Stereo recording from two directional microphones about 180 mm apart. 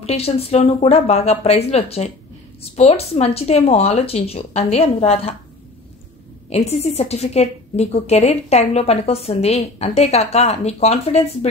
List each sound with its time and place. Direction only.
0.0 s a woman's voice: 35° left (ahead or behind)
6.5 s a woman's voice: 35° left (ahead or behind)